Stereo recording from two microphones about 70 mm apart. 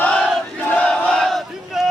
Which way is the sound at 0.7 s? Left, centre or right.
Centre.